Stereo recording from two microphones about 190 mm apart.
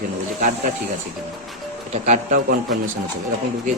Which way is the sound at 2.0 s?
40° right (ahead or behind).